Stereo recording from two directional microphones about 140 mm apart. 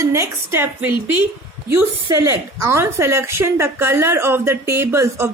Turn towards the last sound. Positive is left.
turn(degrees=-20)  # may be behind; listen again after turning